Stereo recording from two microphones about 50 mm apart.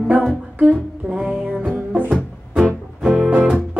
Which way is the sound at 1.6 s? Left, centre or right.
Right.